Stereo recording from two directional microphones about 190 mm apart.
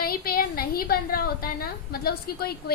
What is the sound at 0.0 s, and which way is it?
A woman's voice, 50° left (ahead or behind).